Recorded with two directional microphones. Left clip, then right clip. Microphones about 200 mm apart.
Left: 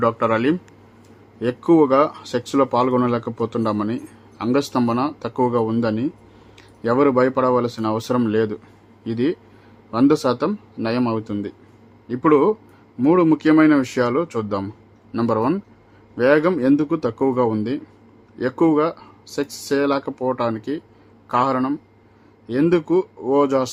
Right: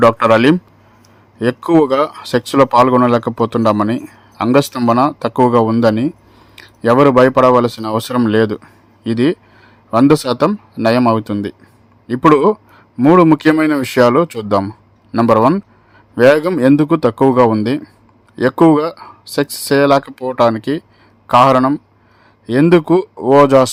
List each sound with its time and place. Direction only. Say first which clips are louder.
0.0 s a man's voice: right 9 dB; 40° right (ahead or behind)